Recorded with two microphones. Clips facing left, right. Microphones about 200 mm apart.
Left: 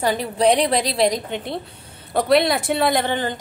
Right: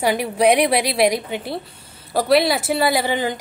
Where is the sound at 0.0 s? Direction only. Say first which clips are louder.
Right 1 dB; 10° right (ahead or behind).